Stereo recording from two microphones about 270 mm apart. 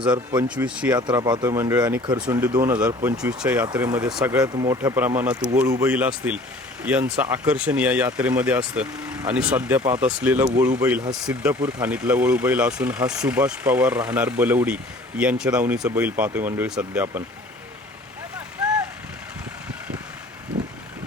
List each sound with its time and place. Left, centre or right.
0.4 s speech: centre
0.9 s speech: centre
4.4 s speech: centre